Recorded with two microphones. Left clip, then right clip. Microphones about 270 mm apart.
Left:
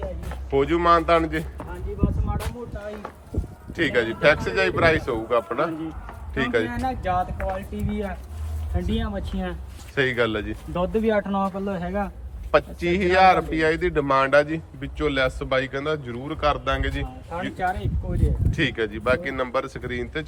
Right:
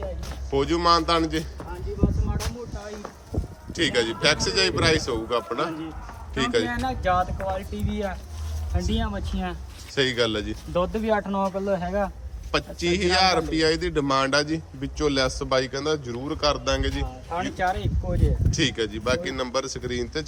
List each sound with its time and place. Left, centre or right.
0.5 s a man's voice: centre
2.0 s a sound: centre
3.7 s a man's voice: centre
17.6 s speech: right
18.5 s speech: centre